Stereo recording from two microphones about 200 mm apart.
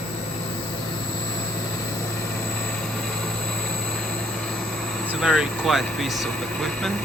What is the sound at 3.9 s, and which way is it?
Vehicle, centre (ahead or behind).